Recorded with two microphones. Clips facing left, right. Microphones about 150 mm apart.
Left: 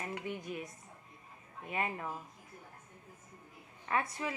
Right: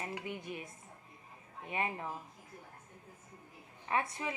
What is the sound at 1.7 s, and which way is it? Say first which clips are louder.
Speech: even; 25° right (ahead or behind).